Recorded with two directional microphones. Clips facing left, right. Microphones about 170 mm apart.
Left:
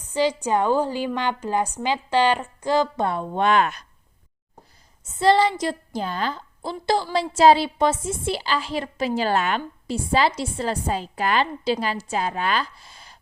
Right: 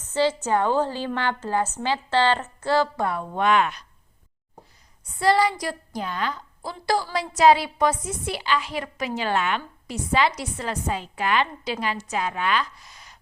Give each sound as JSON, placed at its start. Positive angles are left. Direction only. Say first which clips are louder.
{"t": 0.0, "sound": "a woman's voice", "louder": "even", "side_deg": 15}
{"t": 5.0, "sound": "a woman's voice", "louder": "left 2 dB", "side_deg": 25}